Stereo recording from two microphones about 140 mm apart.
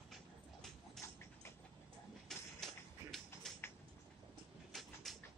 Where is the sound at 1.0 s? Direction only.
20° left (ahead or behind).